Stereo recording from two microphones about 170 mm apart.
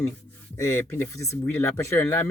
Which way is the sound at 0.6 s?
15° left (ahead or behind).